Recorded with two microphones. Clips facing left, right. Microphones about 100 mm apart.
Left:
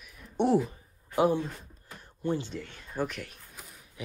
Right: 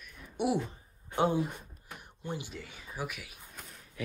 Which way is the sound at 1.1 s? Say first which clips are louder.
Left 3 dB; 20° right (ahead or behind).